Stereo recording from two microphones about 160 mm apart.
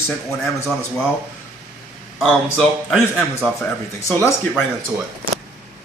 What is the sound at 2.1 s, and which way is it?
Speech, 5° left (ahead or behind).